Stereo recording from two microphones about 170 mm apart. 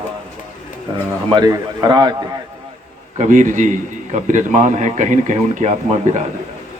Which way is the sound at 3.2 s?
50° right (ahead or behind).